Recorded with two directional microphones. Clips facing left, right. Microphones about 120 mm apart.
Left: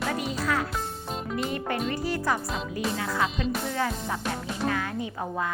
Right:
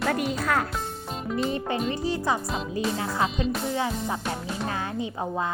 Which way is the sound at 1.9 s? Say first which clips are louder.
Right 1 dB; 25° right (ahead or behind).